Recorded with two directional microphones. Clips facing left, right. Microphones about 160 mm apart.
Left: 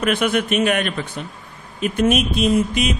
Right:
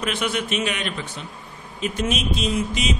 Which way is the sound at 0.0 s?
55° left (ahead or behind).